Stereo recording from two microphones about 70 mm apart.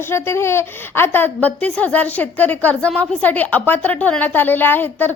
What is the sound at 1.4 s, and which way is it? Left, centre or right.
A woman's voice, centre.